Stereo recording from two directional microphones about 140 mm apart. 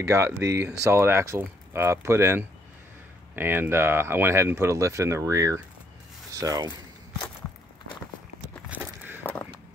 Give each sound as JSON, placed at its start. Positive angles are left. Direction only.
{"t": 0.0, "sound": "speech", "side_deg": -20}
{"t": 8.6, "sound": "walk", "side_deg": -10}
{"t": 9.2, "sound": "vehicle", "side_deg": 10}